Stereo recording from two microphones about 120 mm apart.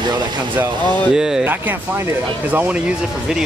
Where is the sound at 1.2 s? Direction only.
5° right (ahead or behind).